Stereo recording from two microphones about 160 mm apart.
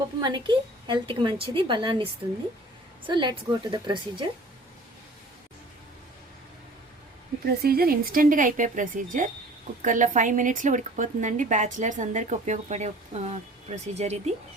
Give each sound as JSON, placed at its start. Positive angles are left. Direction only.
{"t": 0.2, "sound": "a woman's voice", "side_deg": -30}
{"t": 3.1, "sound": "a woman's voice", "side_deg": -30}
{"t": 7.4, "sound": "a woman's voice", "side_deg": -70}